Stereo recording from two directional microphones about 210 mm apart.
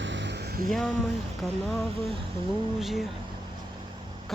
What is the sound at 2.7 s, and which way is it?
Speech, centre (ahead or behind).